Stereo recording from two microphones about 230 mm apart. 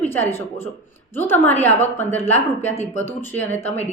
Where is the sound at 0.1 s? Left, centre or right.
Centre.